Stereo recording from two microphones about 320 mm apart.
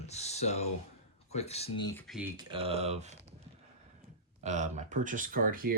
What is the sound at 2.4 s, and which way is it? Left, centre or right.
Speech, centre.